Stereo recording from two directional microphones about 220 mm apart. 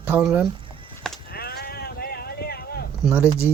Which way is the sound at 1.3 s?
45° left (ahead or behind).